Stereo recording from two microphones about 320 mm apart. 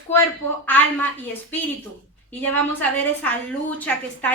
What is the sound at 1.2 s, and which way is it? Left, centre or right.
A woman's voice, centre.